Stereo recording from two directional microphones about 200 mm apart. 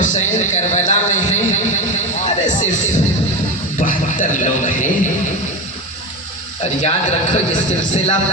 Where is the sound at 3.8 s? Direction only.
40° left (ahead or behind).